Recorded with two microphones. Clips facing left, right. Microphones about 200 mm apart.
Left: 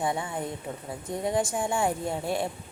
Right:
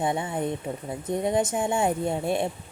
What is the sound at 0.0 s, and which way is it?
Speech, 20° right (ahead or behind).